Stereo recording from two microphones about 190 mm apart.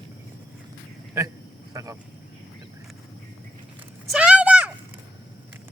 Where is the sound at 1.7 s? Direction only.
15° right (ahead or behind).